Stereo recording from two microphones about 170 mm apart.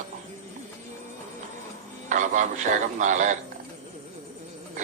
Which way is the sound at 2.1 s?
45° right (ahead or behind).